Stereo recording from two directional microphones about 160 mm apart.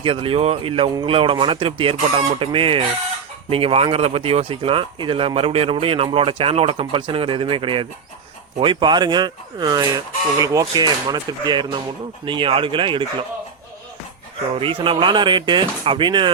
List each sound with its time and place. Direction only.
0.0 s speech: 35° right (ahead or behind)
14.5 s speech: 35° right (ahead or behind)